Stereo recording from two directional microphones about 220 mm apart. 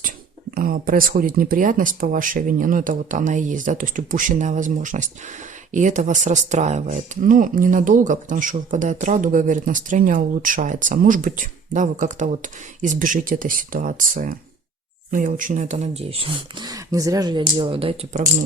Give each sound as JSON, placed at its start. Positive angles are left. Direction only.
{"t": 0.5, "sound": "speech", "side_deg": -40}